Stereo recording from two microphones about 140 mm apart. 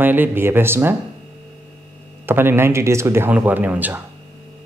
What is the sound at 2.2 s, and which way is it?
A man's voice, 15° right (ahead or behind).